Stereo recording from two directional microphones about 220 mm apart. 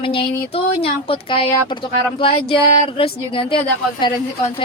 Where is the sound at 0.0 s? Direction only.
25° left (ahead or behind).